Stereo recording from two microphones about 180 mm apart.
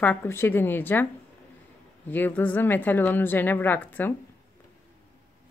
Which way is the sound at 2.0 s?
10° left (ahead or behind).